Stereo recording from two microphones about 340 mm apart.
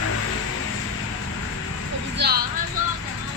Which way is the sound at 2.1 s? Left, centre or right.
Right.